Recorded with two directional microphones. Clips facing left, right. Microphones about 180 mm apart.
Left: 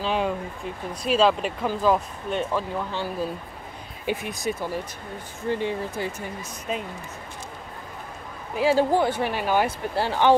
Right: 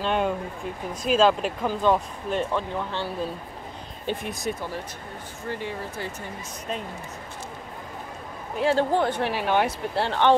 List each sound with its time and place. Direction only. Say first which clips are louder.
0.0 s speech: even; centre (ahead or behind)
5.5 s speech: left 6 dB; 20° left (ahead or behind)
6.7 s speech: left 2 dB; 5° left (ahead or behind)
8.5 s speech: left 2 dB; 5° left (ahead or behind)